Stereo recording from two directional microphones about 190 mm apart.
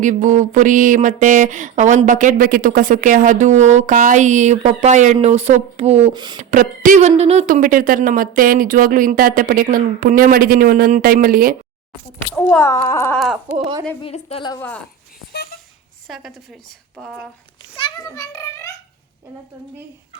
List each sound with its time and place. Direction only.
0.0 s a sound: 40° right (ahead or behind); by 6.4 s 25° right (ahead or behind)
6.4 s speech: 45° right (ahead or behind)
12.3 s speech: 10° left (ahead or behind)
13.1 s a woman's voice: centre (ahead or behind)
14.0 s a woman's voice: 30° left (ahead or behind)
16.0 s a woman's voice: centre (ahead or behind)
17.7 s a sound: 25° left (ahead or behind)